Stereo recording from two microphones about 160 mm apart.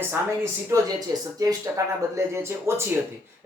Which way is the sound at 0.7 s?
20° right (ahead or behind).